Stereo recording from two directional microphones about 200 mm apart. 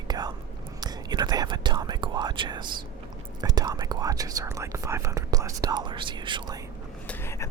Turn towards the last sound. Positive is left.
turn(degrees=10)  # may be behind; listen again after turning